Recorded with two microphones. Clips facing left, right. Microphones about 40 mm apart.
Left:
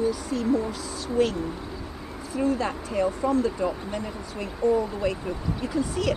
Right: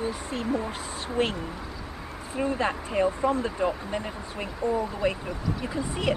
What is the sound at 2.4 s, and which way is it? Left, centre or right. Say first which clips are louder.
Speech: left 1 dB; right.